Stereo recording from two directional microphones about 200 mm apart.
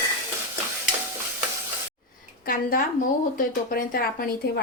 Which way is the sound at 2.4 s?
45° left (ahead or behind).